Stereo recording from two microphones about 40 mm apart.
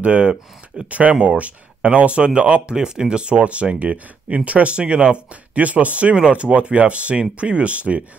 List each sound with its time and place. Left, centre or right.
0.0 s speech: right
2.7 s speech: centre